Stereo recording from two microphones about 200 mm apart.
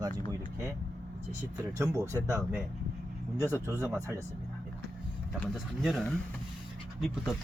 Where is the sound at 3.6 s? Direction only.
15° right (ahead or behind).